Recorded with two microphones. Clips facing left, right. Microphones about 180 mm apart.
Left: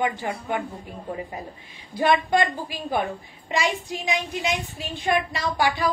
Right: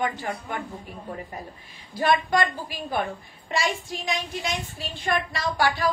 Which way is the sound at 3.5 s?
15° left (ahead or behind).